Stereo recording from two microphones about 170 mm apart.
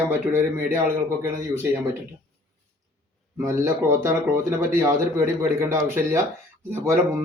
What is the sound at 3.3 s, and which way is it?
Speech, 15° right (ahead or behind).